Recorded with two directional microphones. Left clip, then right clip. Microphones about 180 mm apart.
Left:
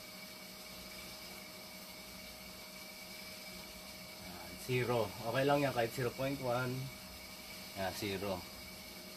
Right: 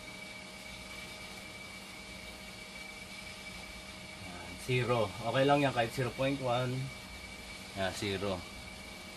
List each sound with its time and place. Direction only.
4.7 s speech: 5° right (ahead or behind)
7.8 s speech: centre (ahead or behind)